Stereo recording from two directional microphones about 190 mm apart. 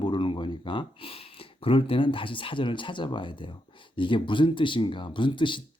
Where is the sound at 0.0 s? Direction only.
25° left (ahead or behind).